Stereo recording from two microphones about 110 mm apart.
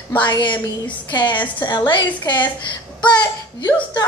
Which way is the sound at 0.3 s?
45° left (ahead or behind).